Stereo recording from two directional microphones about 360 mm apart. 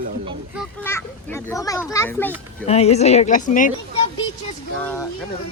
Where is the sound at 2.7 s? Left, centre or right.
Centre.